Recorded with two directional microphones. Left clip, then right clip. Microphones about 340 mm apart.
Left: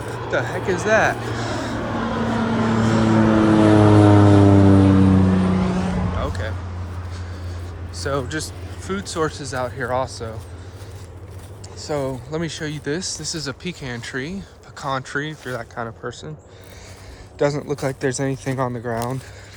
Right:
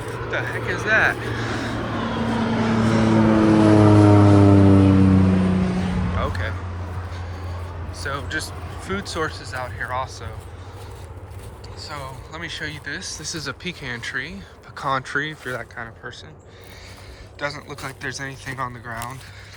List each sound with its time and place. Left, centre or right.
0.3 s vehicle: centre
7.9 s speech: centre
11.8 s speech: centre
17.3 s speech: left